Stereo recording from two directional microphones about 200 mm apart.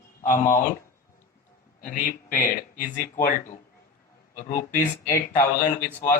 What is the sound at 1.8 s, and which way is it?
Speech, 45° left (ahead or behind).